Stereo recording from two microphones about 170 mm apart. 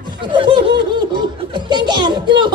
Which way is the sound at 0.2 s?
30° right (ahead or behind).